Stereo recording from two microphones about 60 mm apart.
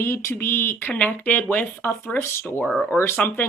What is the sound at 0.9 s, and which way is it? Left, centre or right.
Speech, left.